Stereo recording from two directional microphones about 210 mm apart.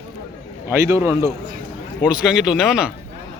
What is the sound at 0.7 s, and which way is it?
Speech, 15° right (ahead or behind).